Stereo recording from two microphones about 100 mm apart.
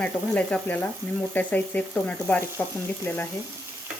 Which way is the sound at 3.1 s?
25° left (ahead or behind).